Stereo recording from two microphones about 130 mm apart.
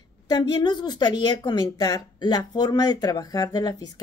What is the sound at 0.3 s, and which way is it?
A woman's voice, 35° left (ahead or behind).